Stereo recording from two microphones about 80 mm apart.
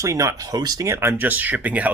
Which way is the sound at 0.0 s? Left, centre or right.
Right.